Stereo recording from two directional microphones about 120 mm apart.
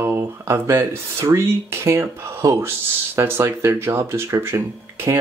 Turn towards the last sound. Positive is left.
turn(degrees=-20)  # may be behind; listen again after turning